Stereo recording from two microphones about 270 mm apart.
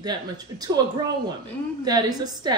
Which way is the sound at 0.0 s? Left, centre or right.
Centre.